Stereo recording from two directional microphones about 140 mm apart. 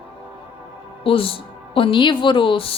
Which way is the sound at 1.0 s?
40° left (ahead or behind).